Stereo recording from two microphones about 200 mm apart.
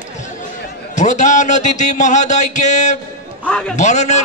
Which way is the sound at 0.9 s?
35° left (ahead or behind).